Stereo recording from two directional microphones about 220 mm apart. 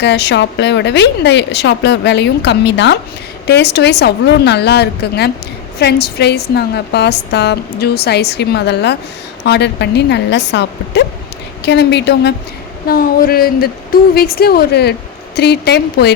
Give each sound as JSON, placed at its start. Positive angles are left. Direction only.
{"t": 0.0, "sound": "a woman's voice", "side_deg": 50}